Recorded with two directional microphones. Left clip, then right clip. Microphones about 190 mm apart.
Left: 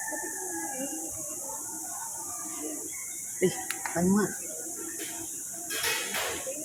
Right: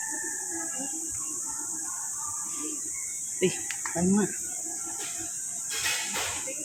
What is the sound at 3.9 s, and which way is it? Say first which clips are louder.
Speech: even; 15° right (ahead or behind).